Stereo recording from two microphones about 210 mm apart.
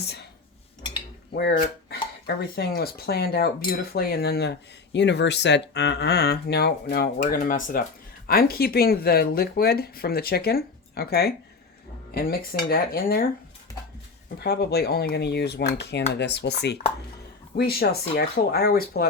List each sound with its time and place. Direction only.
1.3 s speech: 50° left (ahead or behind)
14.3 s speech: 50° left (ahead or behind)